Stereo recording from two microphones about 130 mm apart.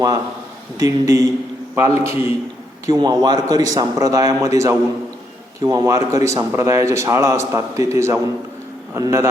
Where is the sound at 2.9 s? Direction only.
35° right (ahead or behind).